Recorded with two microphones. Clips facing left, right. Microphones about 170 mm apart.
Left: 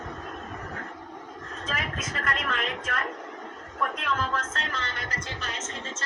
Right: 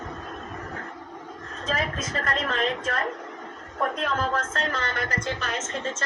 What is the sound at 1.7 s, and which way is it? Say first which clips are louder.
A woman's voice: right 6 dB; 35° right (ahead or behind).